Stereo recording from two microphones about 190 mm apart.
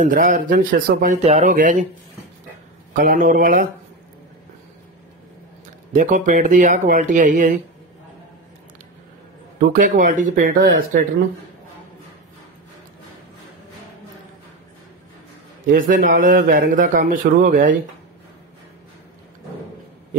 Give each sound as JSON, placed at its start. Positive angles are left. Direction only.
{"t": 0.0, "sound": "a man's voice", "side_deg": -40}
{"t": 2.9, "sound": "a man's voice", "side_deg": -45}
{"t": 5.9, "sound": "a man's voice", "side_deg": -45}
{"t": 9.6, "sound": "a man's voice", "side_deg": -45}
{"t": 15.6, "sound": "a man's voice", "side_deg": -45}